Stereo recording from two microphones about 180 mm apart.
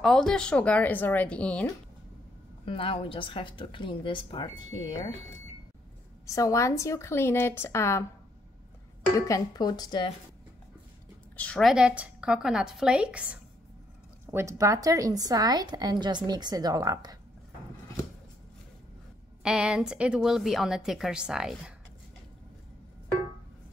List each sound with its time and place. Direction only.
0.0 s speech: centre (ahead or behind)
2.6 s a woman's voice: 30° left (ahead or behind)
6.2 s speech: 15° left (ahead or behind)
9.3 s a woman's voice: 20° left (ahead or behind)
11.3 s a woman's voice: 5° left (ahead or behind); by 17.2 s 20° right (ahead or behind)
19.4 s a woman's voice: 5° right (ahead or behind)